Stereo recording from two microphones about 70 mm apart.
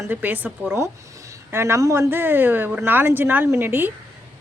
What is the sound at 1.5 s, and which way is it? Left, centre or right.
Speech, right.